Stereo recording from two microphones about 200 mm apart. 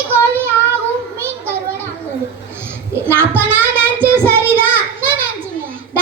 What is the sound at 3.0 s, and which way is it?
Child singing, 10° right (ahead or behind).